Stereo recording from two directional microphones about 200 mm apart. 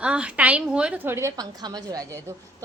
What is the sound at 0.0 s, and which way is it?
A woman's voice, 5° right (ahead or behind).